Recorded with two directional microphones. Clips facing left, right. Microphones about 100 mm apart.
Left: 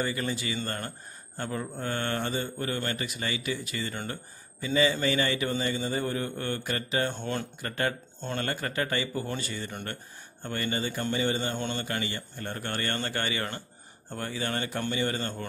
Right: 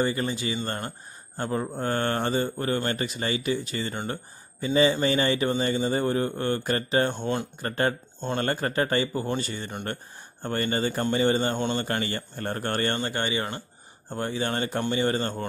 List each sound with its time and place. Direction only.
0.0 s speech: 30° right (ahead or behind)
7.2 s speech: 20° right (ahead or behind)
7.6 s speech: 35° right (ahead or behind)
10.4 s speech: 40° right (ahead or behind)
11.9 s speech: 45° right (ahead or behind)
13.0 s speech: 25° right (ahead or behind)